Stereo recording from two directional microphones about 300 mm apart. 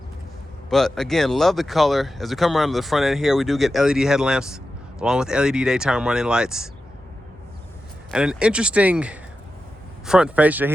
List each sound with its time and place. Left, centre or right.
0.7 s speech: centre
8.1 s speech: centre